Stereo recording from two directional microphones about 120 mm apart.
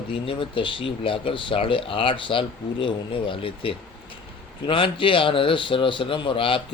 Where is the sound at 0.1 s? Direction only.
45° left (ahead or behind).